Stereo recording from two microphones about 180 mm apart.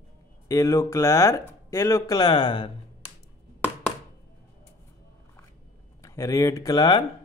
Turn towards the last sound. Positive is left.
turn(degrees=25)  # may be behind; listen again after turning